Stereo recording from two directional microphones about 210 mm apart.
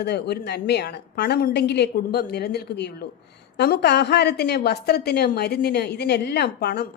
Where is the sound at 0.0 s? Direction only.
50° left (ahead or behind).